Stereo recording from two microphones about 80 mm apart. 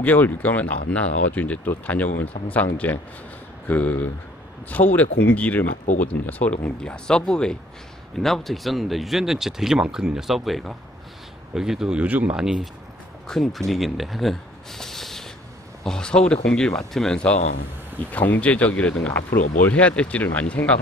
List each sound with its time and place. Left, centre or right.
0.0 s speech: left; by 12.0 s centre
12.0 s speech: centre
12.4 s speech: centre
13.3 s speech: centre